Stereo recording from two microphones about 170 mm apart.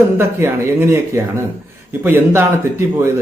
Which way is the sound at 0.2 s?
15° right (ahead or behind).